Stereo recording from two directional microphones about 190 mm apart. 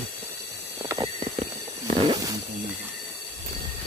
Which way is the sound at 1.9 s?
25° right (ahead or behind).